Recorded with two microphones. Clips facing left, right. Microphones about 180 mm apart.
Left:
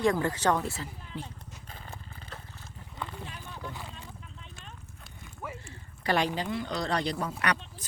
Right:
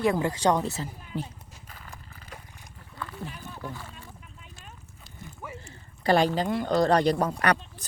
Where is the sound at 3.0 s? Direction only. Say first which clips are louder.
Even; 20° left (ahead or behind).